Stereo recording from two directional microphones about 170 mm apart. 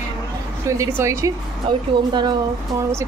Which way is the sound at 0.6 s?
15° right (ahead or behind).